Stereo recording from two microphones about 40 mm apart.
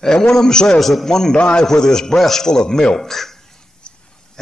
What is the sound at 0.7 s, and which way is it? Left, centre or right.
A man's voice, centre.